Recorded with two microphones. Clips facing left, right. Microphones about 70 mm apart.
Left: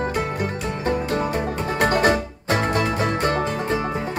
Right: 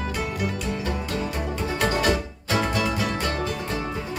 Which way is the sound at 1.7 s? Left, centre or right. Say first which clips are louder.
Left 5 dB; left.